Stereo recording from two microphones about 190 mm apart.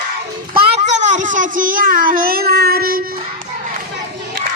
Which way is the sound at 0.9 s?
40° right (ahead or behind).